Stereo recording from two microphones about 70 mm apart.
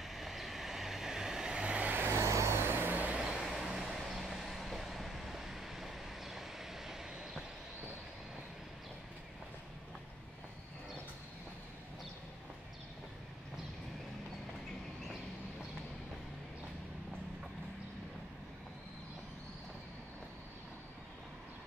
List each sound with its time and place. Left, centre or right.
0.0 s vehicle: centre; by 2.1 s right
2.1 s vehicle: right
3.3 s vehicle: centre